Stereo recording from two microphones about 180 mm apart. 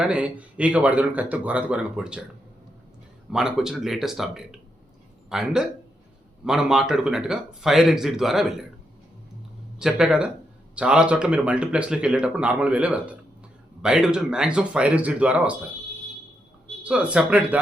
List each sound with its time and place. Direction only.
0.0 s speech: 5° right (ahead or behind)
3.3 s speech: 5° right (ahead or behind)
9.7 s speech: 5° right (ahead or behind)
16.8 s speech: 5° right (ahead or behind)